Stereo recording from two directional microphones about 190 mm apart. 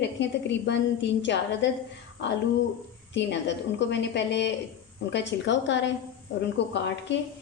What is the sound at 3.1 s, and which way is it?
A woman's voice, 65° left (ahead or behind).